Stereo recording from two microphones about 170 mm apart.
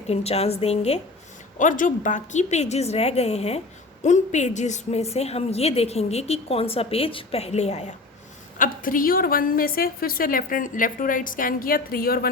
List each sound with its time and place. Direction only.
0.1 s a woman's voice: 35° left (ahead or behind)
1.5 s a woman's voice: 50° left (ahead or behind)
8.5 s a woman's voice: 55° left (ahead or behind)